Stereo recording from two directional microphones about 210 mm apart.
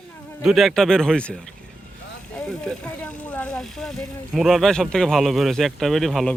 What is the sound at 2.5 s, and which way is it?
Speech, 5° left (ahead or behind).